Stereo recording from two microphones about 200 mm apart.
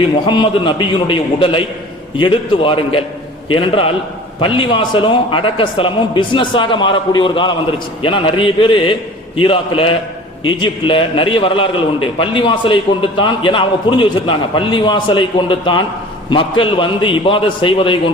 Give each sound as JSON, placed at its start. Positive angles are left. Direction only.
{"t": 0.3, "sound": "a man's voice", "side_deg": 25}